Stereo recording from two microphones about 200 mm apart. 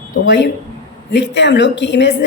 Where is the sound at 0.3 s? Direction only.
60° left (ahead or behind).